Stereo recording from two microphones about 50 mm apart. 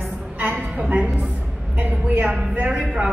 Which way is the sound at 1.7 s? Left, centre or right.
Right.